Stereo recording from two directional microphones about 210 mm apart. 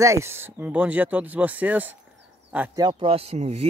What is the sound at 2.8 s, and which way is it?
Speech, 25° right (ahead or behind).